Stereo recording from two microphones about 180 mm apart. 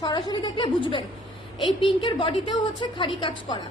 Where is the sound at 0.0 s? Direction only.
25° left (ahead or behind).